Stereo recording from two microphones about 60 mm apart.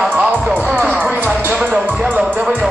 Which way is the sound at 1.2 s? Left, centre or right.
Right.